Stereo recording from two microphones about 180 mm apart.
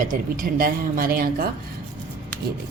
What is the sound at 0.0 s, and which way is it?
Speech, 50° right (ahead or behind).